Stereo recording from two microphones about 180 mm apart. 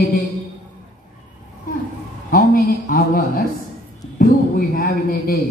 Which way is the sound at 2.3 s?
50° left (ahead or behind).